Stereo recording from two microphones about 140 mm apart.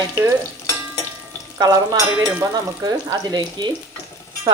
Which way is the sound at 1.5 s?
25° right (ahead or behind).